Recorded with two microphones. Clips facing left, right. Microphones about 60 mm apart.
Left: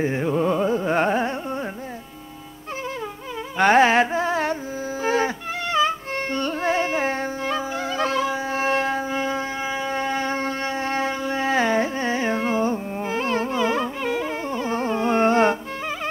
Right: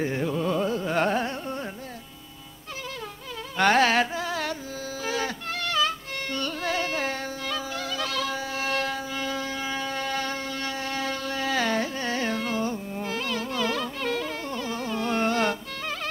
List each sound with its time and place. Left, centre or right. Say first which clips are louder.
0.0 s carnatic music: left 5 dB; left
3.5 s carnatic music: left 5 dB; left
5.0 s music: left 7 dB; left